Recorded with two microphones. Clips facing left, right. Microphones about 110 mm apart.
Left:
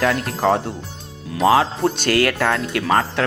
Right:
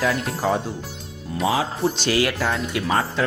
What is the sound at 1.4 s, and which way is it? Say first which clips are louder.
Speech: left 6 dB; 70° left (ahead or behind).